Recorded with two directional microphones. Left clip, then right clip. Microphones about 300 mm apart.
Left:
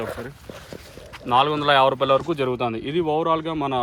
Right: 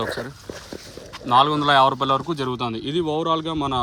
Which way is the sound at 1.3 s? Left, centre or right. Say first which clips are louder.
Right 1 dB; centre.